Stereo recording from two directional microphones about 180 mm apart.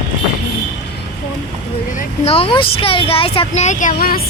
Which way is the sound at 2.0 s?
35° left (ahead or behind).